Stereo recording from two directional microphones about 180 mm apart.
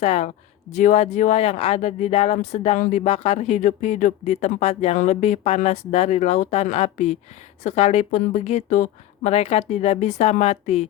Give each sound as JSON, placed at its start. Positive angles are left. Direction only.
{"t": 0.0, "sound": "speech", "side_deg": 35}